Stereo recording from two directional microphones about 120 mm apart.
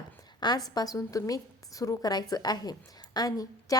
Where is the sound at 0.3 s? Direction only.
35° left (ahead or behind).